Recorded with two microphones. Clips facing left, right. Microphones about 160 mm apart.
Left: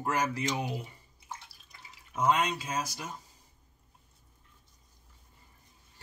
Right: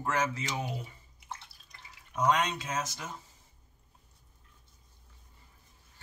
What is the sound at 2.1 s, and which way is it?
Speech, 5° left (ahead or behind).